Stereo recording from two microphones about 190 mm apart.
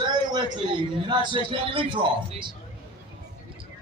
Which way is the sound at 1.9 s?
25° right (ahead or behind).